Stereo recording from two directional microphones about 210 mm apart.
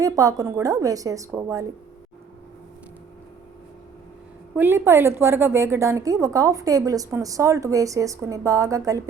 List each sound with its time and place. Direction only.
0.0 s a woman's voice: 15° right (ahead or behind)
4.5 s a woman's voice: 10° right (ahead or behind)